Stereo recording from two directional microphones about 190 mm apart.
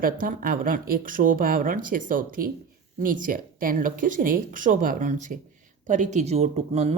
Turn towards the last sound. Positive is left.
turn(degrees=-35)  # may be behind; listen again after turning